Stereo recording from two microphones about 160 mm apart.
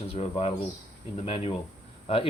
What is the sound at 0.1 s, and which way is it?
Speech, 40° left (ahead or behind).